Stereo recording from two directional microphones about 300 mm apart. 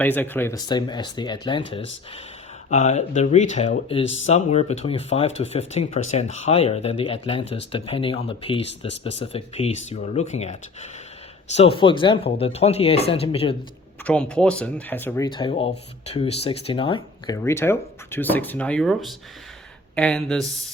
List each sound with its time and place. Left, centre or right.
0.0 s speech: centre
14.0 s speech: centre